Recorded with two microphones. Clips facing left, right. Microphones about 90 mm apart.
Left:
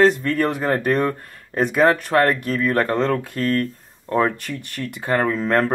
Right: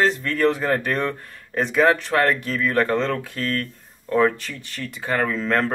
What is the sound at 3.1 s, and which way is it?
Speech, 40° left (ahead or behind).